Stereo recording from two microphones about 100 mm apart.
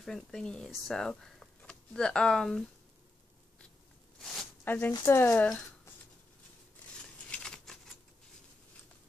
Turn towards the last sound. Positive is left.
turn(degrees=5)  # may be behind; listen again after turning